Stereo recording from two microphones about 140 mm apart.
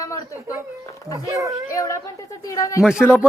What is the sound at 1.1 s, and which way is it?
Speech, 25° right (ahead or behind).